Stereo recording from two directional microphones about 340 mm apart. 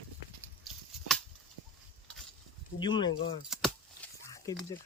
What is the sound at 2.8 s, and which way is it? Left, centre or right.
Speech, centre.